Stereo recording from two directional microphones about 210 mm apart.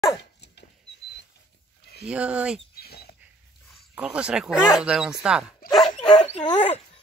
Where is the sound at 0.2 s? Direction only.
55° left (ahead or behind).